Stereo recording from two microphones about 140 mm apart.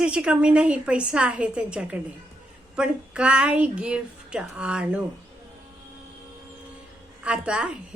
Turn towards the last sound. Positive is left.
turn(degrees=-5)  # may be behind; listen again after turning